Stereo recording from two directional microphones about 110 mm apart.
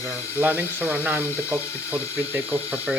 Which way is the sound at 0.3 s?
15° right (ahead or behind).